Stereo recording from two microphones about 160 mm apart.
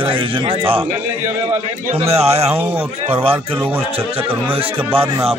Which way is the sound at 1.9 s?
40° right (ahead or behind).